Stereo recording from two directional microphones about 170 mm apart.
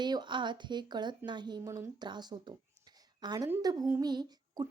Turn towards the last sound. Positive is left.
turn(degrees=-25)  # may be behind; listen again after turning